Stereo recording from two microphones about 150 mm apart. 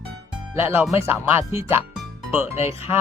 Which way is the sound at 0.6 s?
15° right (ahead or behind).